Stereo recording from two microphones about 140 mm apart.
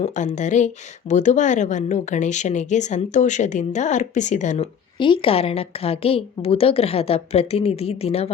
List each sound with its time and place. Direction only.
0.0 s speech: 60° left (ahead or behind)
4.9 s a woman's voice: 35° left (ahead or behind)